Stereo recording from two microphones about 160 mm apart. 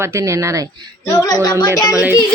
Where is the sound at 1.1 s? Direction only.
25° left (ahead or behind).